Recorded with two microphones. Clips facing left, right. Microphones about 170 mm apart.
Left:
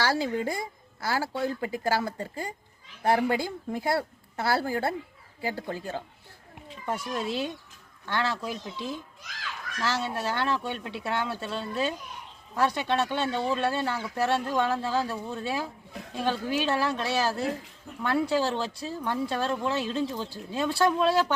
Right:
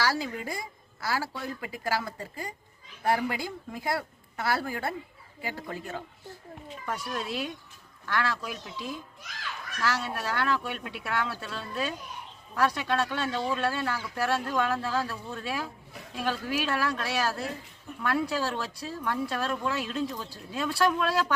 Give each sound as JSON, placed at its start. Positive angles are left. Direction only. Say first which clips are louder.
{"t": 0.0, "sound": "speech", "louder": "left 3 dB", "side_deg": 30}